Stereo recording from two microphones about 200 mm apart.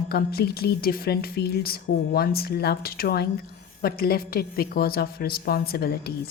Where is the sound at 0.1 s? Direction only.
50° left (ahead or behind).